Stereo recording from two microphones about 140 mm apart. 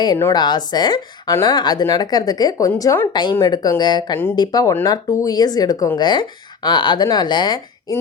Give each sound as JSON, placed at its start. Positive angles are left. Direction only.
{"t": 0.3, "sound": "speech", "side_deg": 30}